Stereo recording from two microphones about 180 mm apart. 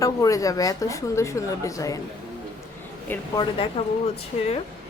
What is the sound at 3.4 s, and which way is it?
Speech, 30° left (ahead or behind).